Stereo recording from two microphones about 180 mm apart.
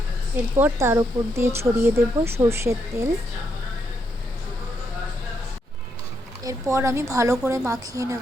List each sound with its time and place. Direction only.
0.5 s speech: 15° right (ahead or behind)
6.4 s speech: 15° right (ahead or behind)